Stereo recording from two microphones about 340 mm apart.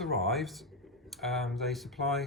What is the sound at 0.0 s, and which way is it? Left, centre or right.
Speech, centre.